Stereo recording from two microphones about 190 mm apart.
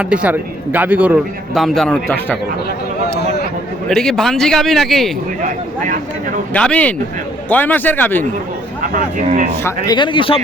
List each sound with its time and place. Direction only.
0.0 s a man's voice: 5° right (ahead or behind)
3.2 s speech: 60° left (ahead or behind)
3.8 s a man's voice: 5° left (ahead or behind)
6.5 s a man's voice: 5° left (ahead or behind)
8.8 s speech: 45° right (ahead or behind)
9.6 s speech: 20° left (ahead or behind)